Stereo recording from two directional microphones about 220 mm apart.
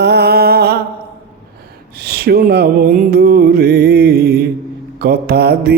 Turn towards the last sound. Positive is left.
turn(degrees=-45)  # may be behind; listen again after turning